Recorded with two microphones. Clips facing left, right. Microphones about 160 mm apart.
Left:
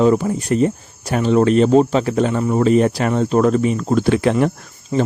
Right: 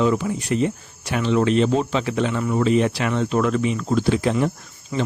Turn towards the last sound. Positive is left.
turn(degrees=30)  # may be behind; listen again after turning